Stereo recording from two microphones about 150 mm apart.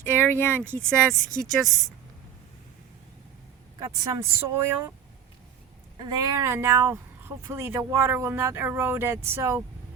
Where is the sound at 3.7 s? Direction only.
25° right (ahead or behind).